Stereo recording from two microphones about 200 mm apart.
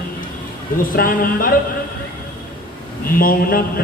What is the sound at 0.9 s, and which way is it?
Speech, 45° left (ahead or behind).